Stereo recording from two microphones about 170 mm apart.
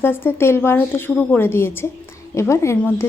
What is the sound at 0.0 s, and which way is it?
Speech, 10° left (ahead or behind).